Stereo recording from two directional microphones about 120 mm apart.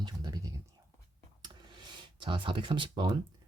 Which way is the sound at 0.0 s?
35° right (ahead or behind).